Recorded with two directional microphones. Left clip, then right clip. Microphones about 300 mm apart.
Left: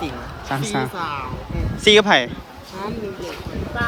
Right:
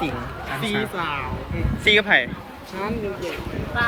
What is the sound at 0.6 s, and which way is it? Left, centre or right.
A woman's voice, centre.